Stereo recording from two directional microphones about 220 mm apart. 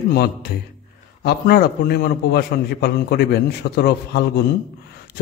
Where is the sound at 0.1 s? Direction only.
45° left (ahead or behind).